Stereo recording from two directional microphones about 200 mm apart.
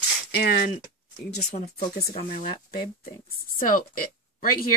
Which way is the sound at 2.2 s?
45° left (ahead or behind).